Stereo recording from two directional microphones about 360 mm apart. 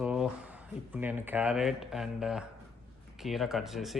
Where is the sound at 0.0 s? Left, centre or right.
Centre.